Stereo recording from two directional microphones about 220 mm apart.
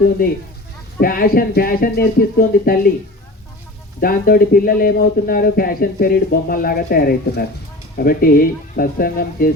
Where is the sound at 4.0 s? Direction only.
40° left (ahead or behind).